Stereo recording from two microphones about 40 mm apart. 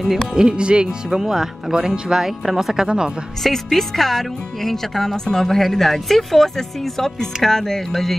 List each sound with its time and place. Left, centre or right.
0.3 s speech: right
1.1 s speech: centre
3.4 s speech: centre